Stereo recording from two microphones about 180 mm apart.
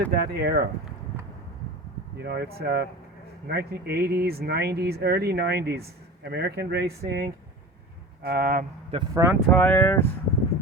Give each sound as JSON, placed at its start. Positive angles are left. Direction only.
{"t": 0.1, "sound": "speech", "side_deg": -60}
{"t": 2.1, "sound": "speech", "side_deg": -65}
{"t": 9.1, "sound": "speech", "side_deg": -15}
{"t": 9.5, "sound": "speech", "side_deg": 10}